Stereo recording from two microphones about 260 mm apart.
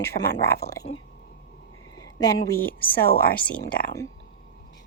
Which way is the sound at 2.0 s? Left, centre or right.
Centre.